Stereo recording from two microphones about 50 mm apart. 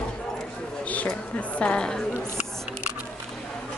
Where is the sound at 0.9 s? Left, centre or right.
Left.